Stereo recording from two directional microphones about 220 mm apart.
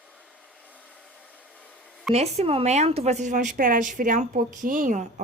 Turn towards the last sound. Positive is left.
turn(degrees=-35)  # may be behind; listen again after turning